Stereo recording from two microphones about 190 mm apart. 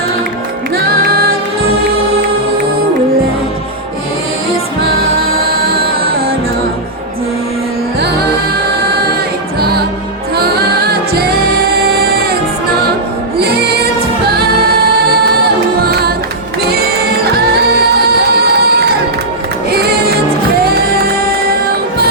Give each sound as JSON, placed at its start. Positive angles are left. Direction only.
{"t": 5.4, "sound": "music", "side_deg": -55}
{"t": 7.9, "sound": "music", "side_deg": -60}
{"t": 9.6, "sound": "music", "side_deg": -55}
{"t": 13.4, "sound": "music", "side_deg": -55}
{"t": 15.2, "sound": "music", "side_deg": -55}
{"t": 17.3, "sound": "music", "side_deg": -55}